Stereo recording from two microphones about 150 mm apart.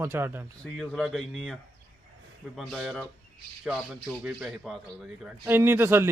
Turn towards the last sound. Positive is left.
turn(degrees=-15)  # may be behind; listen again after turning